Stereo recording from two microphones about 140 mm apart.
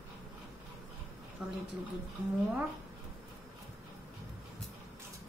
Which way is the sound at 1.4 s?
5° right (ahead or behind).